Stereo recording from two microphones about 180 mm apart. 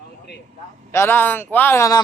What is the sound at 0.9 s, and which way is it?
A man's voice, 10° left (ahead or behind).